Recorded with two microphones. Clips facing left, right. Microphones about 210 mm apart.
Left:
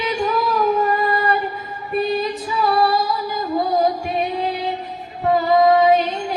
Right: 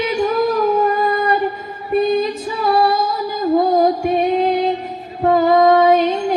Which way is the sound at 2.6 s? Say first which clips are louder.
Right 2 dB; 45° right (ahead or behind).